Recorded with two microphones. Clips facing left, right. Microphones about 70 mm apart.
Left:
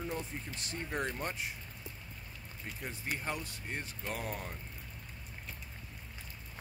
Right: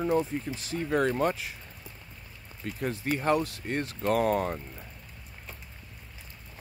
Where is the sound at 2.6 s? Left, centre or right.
Right.